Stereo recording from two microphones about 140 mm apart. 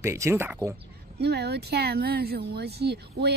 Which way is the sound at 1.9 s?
90° right.